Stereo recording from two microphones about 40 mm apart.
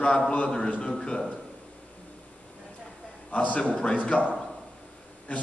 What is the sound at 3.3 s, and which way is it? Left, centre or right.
A man's voice, left.